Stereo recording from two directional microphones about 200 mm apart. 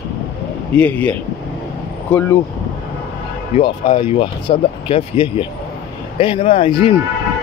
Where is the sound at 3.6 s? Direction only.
25° left (ahead or behind).